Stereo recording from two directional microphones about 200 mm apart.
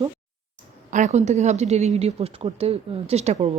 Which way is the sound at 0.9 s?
35° right (ahead or behind).